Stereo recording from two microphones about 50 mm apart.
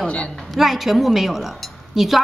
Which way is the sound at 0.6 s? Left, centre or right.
Centre.